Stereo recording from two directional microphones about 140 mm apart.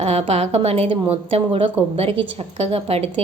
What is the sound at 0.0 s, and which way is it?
A woman's voice, 45° right (ahead or behind).